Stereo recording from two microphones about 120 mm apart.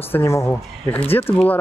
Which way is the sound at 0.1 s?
25° left (ahead or behind).